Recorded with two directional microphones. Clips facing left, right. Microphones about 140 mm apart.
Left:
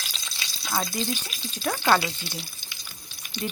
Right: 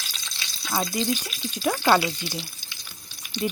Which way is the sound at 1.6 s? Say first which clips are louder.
Right 2 dB; 10° right (ahead or behind).